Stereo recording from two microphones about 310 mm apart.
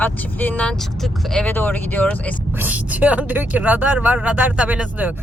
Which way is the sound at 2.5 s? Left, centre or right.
Centre.